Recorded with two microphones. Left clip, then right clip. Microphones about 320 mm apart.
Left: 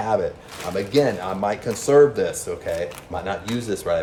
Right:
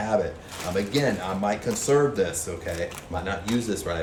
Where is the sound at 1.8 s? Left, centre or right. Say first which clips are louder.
Left 7 dB; centre.